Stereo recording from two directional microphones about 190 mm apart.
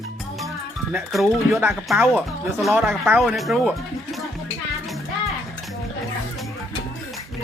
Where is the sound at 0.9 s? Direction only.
Centre (ahead or behind).